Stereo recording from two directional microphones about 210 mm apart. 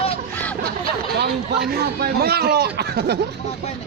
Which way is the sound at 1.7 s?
50° right (ahead or behind).